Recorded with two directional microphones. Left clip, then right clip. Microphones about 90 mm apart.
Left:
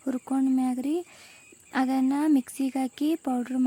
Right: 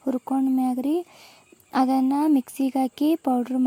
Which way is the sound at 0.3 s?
5° right (ahead or behind).